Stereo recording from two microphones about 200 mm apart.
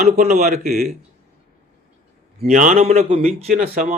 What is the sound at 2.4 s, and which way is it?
Speech, 40° right (ahead or behind).